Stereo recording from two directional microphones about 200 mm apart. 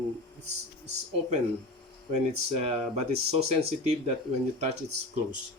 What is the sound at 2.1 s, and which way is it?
Speech, 30° right (ahead or behind).